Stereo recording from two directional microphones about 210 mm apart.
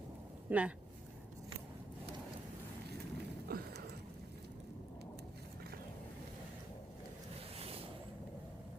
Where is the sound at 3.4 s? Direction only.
45° right (ahead or behind).